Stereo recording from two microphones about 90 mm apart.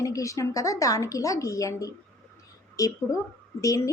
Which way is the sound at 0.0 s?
35° left (ahead or behind).